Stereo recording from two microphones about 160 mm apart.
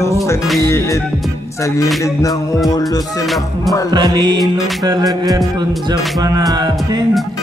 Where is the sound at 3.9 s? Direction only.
25° right (ahead or behind).